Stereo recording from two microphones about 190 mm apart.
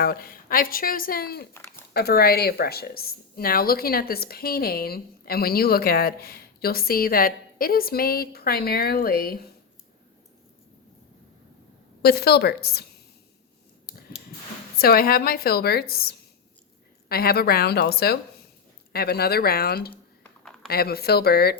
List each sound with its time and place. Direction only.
0.0 s a woman's voice: 50° left (ahead or behind)
1.5 s a sound: 10° left (ahead or behind)
1.9 s a woman's voice: 55° left (ahead or behind)
12.0 s a woman's voice: 55° left (ahead or behind)
14.8 s a woman's voice: 50° left (ahead or behind)
20.4 s a sound: centre (ahead or behind)
20.7 s a woman's voice: 55° left (ahead or behind)